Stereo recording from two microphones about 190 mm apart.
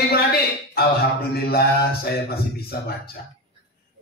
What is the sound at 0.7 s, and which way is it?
A man's voice, 55° left (ahead or behind).